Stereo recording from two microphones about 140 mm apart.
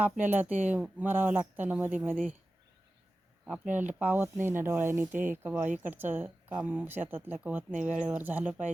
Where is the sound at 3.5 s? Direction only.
10° right (ahead or behind).